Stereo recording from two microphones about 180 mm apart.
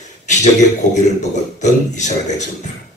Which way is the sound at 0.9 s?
40° left (ahead or behind).